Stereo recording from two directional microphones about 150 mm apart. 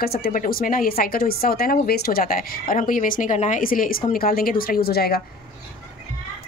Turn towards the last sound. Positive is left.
turn(degrees=90)